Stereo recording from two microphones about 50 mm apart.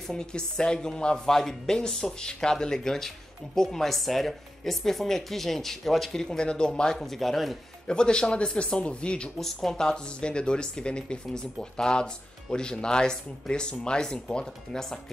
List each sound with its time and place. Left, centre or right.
0.1 s speech: centre
6.2 s speech: centre
7.8 s speech: centre
9.4 s speech: centre